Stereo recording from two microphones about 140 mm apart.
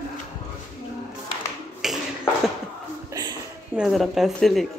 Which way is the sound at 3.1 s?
30° right (ahead or behind).